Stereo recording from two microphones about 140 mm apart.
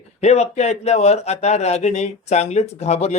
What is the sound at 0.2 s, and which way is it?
Speech, 50° left (ahead or behind).